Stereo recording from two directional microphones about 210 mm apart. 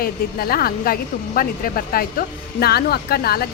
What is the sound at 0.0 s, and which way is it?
A woman's voice, 45° left (ahead or behind).